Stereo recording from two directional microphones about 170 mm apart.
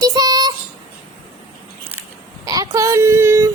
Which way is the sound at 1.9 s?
15° right (ahead or behind).